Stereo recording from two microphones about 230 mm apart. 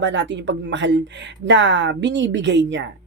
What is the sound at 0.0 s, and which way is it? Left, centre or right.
A woman's voice, right.